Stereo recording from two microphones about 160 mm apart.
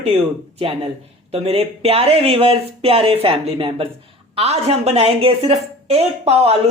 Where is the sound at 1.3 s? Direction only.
40° right (ahead or behind).